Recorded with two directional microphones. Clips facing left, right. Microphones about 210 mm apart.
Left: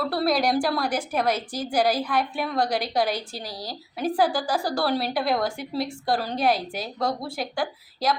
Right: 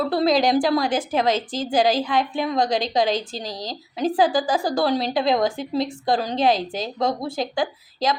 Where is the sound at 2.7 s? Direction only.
90° right.